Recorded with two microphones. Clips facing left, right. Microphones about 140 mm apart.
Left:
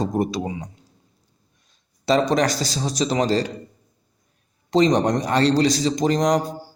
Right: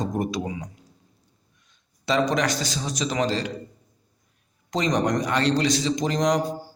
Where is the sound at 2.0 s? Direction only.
35° left (ahead or behind).